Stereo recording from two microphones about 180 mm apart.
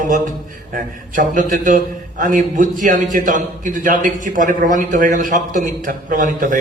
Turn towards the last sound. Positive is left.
turn(degrees=-45)  # may be behind; listen again after turning